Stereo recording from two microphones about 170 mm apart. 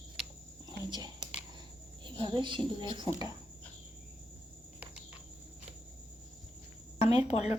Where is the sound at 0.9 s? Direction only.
25° right (ahead or behind).